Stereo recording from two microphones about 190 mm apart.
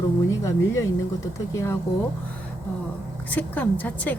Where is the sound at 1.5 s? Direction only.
15° left (ahead or behind).